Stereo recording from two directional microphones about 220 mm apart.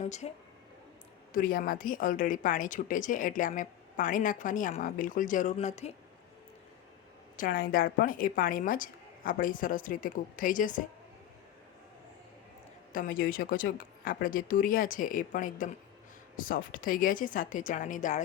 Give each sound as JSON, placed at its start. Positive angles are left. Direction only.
{"t": 0.0, "sound": "speech", "side_deg": 30}
{"t": 1.3, "sound": "a woman's voice", "side_deg": 40}
{"t": 7.3, "sound": "a woman's voice", "side_deg": 40}
{"t": 12.9, "sound": "a woman's voice", "side_deg": 40}